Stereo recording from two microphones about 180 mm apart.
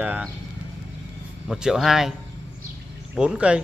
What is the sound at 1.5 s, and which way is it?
Speech, centre (ahead or behind).